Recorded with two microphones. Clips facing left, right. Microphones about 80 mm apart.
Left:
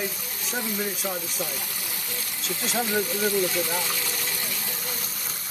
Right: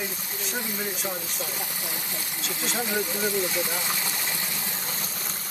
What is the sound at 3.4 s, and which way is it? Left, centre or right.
Speech, right.